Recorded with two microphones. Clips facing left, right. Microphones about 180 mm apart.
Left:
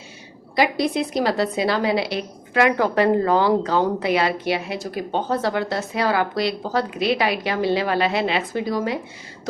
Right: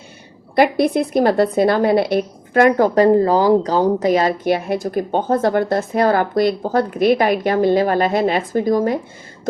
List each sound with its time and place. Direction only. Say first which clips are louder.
0.5 s a woman's voice: right 6 dB; 55° right (ahead or behind)